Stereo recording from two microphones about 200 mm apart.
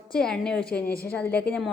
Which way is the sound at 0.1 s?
5° left (ahead or behind).